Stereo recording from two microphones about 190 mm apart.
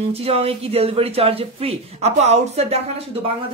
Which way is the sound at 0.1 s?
30° right (ahead or behind).